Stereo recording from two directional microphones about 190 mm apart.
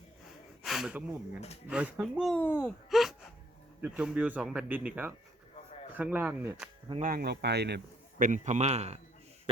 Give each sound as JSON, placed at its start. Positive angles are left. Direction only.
{"t": 0.6, "sound": "speech", "side_deg": 0}
{"t": 2.3, "sound": "speech", "side_deg": 10}
{"t": 2.9, "sound": "speech", "side_deg": 0}
{"t": 7.0, "sound": "speech", "side_deg": -50}
{"t": 8.2, "sound": "a man's voice", "side_deg": -40}